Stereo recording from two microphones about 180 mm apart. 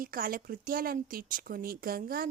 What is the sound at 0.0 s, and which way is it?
A woman's voice, 55° right (ahead or behind).